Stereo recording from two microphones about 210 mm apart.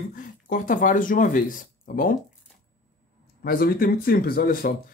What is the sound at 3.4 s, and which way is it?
Speech, 45° left (ahead or behind).